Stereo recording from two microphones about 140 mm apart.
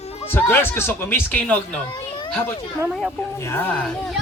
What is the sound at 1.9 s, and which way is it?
Children playing, 35° left (ahead or behind).